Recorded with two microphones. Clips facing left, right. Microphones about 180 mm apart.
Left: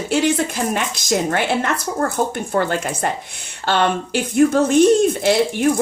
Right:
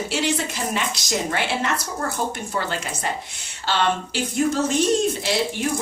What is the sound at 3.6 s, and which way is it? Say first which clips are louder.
Speech: left 4 dB; 55° left (ahead or behind).